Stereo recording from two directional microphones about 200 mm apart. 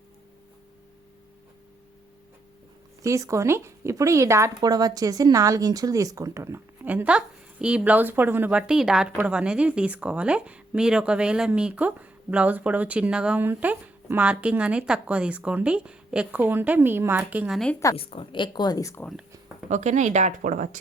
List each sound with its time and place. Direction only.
3.0 s speech: 15° right (ahead or behind); by 17.7 s centre (ahead or behind)
17.9 s speech: 30° left (ahead or behind)
19.7 s speech: 35° right (ahead or behind)